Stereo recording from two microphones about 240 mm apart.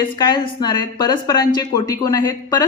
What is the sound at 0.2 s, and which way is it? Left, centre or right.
A woman's voice, centre.